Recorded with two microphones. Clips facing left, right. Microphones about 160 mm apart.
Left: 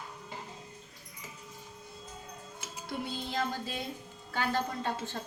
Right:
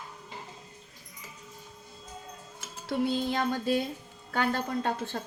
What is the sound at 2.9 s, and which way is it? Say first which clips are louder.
Music: right 10 dB; 60° right (ahead or behind).